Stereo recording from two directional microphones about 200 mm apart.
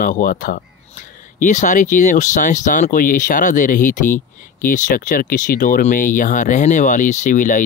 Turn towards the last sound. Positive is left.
turn(degrees=40)  # may be behind; listen again after turning